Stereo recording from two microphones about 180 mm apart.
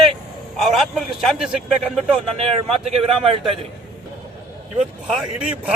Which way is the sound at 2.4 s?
35° right (ahead or behind).